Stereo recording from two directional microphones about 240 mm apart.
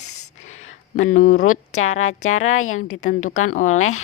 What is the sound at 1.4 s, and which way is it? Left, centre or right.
Speech, left.